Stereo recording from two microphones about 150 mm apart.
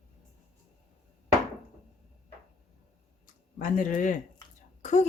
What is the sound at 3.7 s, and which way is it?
Speech, 60° left (ahead or behind).